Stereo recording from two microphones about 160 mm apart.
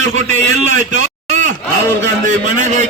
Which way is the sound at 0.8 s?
50° right (ahead or behind).